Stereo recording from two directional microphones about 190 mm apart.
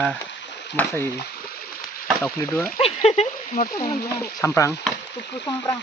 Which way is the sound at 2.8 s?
30° left (ahead or behind).